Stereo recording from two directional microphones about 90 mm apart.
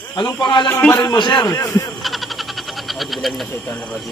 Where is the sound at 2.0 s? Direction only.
Centre (ahead or behind).